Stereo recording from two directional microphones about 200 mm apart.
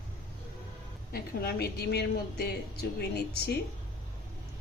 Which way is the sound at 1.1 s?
50° left (ahead or behind).